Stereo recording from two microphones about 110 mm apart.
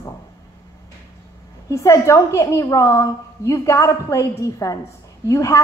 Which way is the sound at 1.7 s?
25° left (ahead or behind).